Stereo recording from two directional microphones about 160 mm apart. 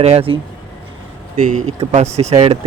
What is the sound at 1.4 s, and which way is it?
Speech, 50° right (ahead or behind).